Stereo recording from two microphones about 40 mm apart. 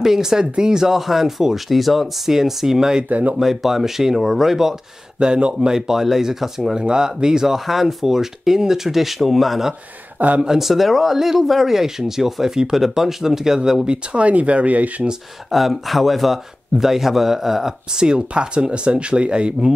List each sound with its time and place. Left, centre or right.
0.0 s speech: centre
3.1 s speech: right
3.3 s speech: centre
5.2 s speech: centre
10.1 s speech: right
10.6 s speech: centre
13.8 s speech: right
15.5 s speech: centre; by 19.7 s right